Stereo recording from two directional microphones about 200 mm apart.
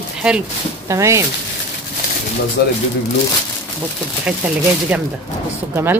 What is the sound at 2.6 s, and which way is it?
Speech, 50° left (ahead or behind).